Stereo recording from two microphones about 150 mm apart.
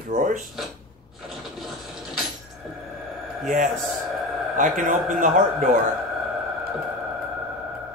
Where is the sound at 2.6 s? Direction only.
Centre (ahead or behind).